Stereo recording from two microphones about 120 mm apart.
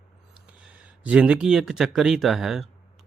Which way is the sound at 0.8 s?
10° right (ahead or behind).